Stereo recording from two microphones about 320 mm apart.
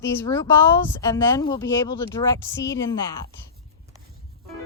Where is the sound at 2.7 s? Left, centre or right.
Centre.